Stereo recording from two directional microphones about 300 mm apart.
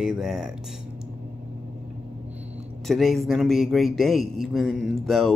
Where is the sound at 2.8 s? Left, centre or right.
Centre.